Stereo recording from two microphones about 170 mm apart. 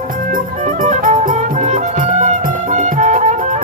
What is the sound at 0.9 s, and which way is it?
Music, 45° right (ahead or behind).